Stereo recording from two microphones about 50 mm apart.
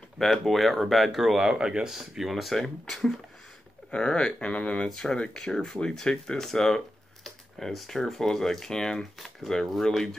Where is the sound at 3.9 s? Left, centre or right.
Centre.